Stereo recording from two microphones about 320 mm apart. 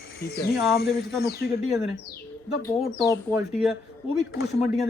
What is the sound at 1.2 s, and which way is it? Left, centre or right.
Speech, left.